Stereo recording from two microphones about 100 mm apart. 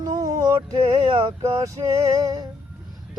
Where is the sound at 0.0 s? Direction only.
40° right (ahead or behind).